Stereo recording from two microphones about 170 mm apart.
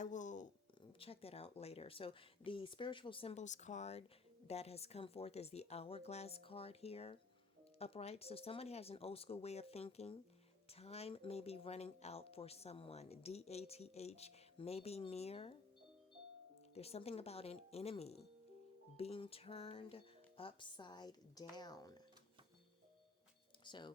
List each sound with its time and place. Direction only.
0.0 s a sound: 45° left (ahead or behind)
0.9 s speech: 35° left (ahead or behind)
16.7 s speech: 35° left (ahead or behind)
23.6 s speech: 25° left (ahead or behind)